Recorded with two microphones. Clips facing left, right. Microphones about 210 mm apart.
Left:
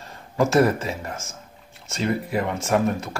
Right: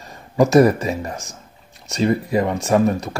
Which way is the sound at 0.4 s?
15° right (ahead or behind).